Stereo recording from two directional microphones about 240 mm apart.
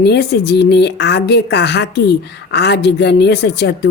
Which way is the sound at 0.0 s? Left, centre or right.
Left.